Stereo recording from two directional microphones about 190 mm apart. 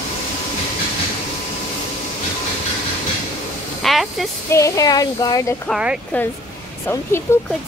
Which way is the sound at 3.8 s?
Centre (ahead or behind).